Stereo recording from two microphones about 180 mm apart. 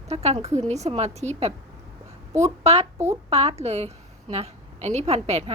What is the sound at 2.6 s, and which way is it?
A woman's voice, 35° right (ahead or behind).